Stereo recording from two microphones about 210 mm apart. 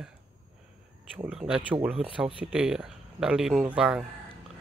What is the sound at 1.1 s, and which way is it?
Speech, 5° right (ahead or behind).